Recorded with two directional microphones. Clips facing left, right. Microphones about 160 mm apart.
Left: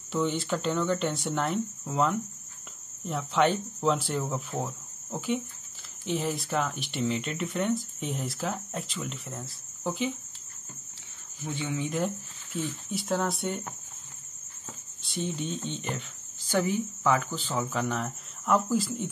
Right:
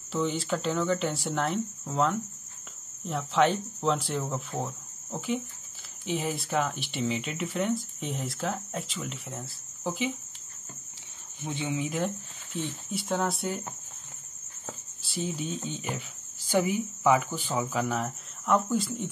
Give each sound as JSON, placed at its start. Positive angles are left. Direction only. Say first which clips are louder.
{"t": 0.1, "sound": "speech", "louder": "left 1 dB", "side_deg": 0}
{"t": 11.4, "sound": "speech", "louder": "right 1 dB", "side_deg": -20}
{"t": 12.9, "sound": "speech", "louder": "even", "side_deg": 0}
{"t": 15.0, "sound": "speech", "louder": "even", "side_deg": -5}